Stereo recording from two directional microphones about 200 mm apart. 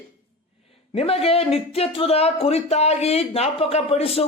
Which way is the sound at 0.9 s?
30° left (ahead or behind).